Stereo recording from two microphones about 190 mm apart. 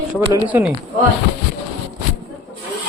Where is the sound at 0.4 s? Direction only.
10° right (ahead or behind).